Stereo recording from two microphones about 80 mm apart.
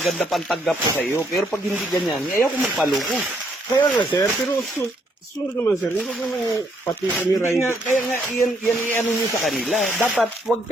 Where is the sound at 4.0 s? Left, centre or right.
Left.